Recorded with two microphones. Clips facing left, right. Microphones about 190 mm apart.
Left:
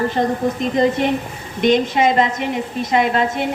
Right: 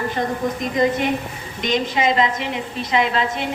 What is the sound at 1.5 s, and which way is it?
A woman's voice, 55° left (ahead or behind).